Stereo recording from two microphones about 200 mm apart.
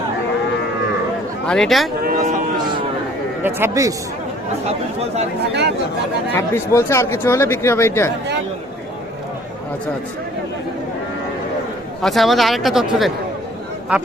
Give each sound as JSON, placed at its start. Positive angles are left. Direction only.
{"t": 1.5, "sound": "speech", "side_deg": 5}
{"t": 2.0, "sound": "a sound", "side_deg": -40}
{"t": 3.4, "sound": "speech", "side_deg": -15}
{"t": 4.6, "sound": "speech", "side_deg": -30}
{"t": 6.3, "sound": "speech", "side_deg": 15}
{"t": 12.0, "sound": "speech", "side_deg": 0}